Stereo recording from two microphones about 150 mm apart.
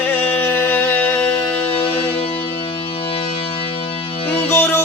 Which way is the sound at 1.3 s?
35° left (ahead or behind).